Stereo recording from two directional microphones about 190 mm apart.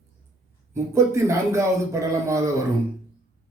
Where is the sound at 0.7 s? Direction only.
15° right (ahead or behind).